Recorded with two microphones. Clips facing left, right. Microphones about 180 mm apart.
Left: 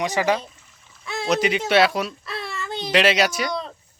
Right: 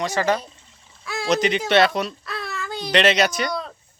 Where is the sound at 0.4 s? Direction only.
30° right (ahead or behind).